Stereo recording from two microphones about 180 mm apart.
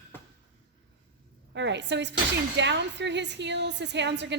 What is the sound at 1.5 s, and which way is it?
A woman's voice, 80° right.